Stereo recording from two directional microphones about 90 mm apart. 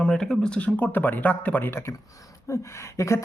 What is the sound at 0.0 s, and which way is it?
Speech, 5° left (ahead or behind).